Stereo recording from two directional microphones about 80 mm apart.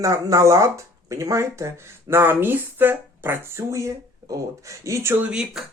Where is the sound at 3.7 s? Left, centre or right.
Right.